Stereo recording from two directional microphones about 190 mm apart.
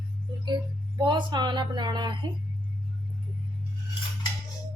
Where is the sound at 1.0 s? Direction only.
25° right (ahead or behind).